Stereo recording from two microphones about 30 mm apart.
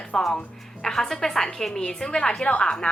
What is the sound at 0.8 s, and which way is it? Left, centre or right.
Speech, centre.